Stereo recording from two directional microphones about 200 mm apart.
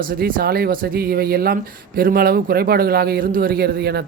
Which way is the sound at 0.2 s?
45° right (ahead or behind).